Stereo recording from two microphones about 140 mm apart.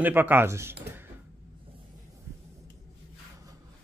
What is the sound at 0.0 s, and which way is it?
Speech, 15° right (ahead or behind).